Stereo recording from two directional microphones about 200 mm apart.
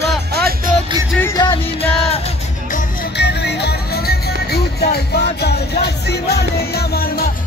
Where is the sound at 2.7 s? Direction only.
55° left (ahead or behind).